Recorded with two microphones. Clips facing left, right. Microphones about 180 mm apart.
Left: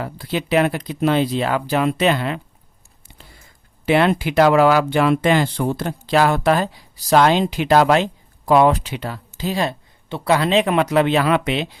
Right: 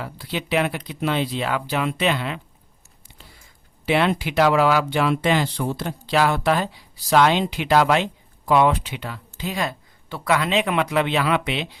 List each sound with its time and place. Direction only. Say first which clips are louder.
0.0 s speech: left 5 dB; 45° left (ahead or behind)
3.8 s speech: left 4 dB; 45° left (ahead or behind)